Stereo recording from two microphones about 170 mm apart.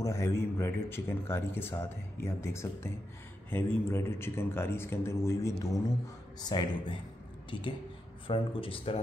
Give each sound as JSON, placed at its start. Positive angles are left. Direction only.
{"t": 0.0, "sound": "speech", "side_deg": 15}